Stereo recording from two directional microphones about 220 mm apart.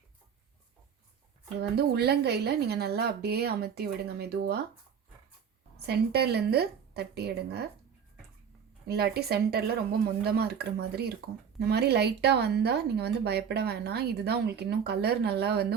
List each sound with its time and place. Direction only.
1.7 s speech: 45° right (ahead or behind)
5.8 s speech: 45° right (ahead or behind)
8.9 s speech: 45° right (ahead or behind)